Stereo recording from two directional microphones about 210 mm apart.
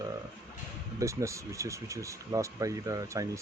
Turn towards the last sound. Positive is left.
turn(degrees=-15)  # may be behind; listen again after turning